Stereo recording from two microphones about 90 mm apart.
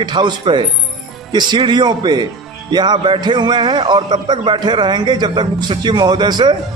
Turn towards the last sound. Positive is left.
turn(degrees=-55)  # may be behind; listen again after turning